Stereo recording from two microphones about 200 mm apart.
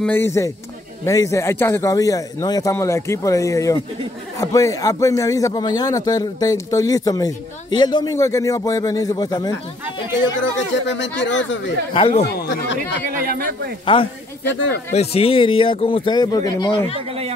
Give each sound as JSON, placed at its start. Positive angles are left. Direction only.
{"t": 0.0, "sound": "a man's voice", "side_deg": 10}
{"t": 10.9, "sound": "speech", "side_deg": 65}
{"t": 11.9, "sound": "speech", "side_deg": 30}
{"t": 12.3, "sound": "speech", "side_deg": 60}
{"t": 13.1, "sound": "speech", "side_deg": -45}
{"t": 14.9, "sound": "speech", "side_deg": 30}